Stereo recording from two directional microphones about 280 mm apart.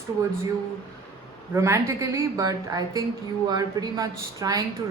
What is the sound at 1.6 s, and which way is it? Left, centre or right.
A woman's voice, centre.